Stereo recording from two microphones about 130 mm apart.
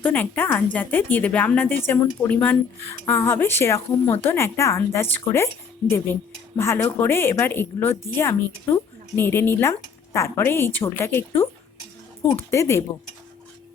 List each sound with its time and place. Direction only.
0.0 s speech: 15° left (ahead or behind)
12.5 s speech: 20° left (ahead or behind)